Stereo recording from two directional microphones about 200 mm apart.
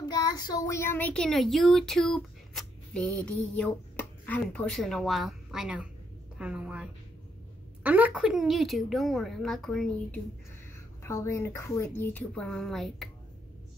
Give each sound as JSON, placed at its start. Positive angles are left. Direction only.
{"t": 0.0, "sound": "a child's voice", "side_deg": 20}
{"t": 11.1, "sound": "speech", "side_deg": 15}